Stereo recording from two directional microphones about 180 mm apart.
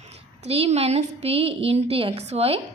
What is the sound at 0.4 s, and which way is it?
A woman's voice, 35° right (ahead or behind).